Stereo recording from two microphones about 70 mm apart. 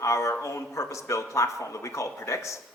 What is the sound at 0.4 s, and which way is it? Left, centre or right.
Speech, left.